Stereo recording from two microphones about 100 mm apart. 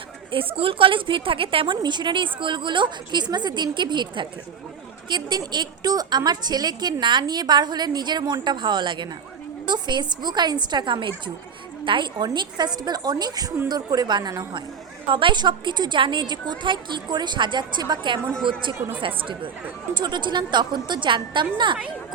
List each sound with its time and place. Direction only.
0.3 s a woman's voice: 65° right (ahead or behind)